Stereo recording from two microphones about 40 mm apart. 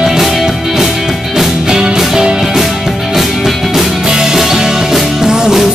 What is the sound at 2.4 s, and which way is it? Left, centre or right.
Music, centre.